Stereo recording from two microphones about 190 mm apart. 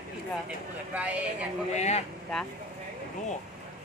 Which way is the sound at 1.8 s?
35° left (ahead or behind).